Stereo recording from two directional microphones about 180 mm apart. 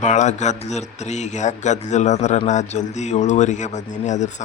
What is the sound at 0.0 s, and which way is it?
Speech, 40° left (ahead or behind).